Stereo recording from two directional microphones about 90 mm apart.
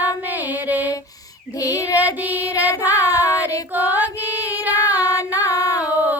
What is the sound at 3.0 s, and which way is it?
Child singing, 35° left (ahead or behind).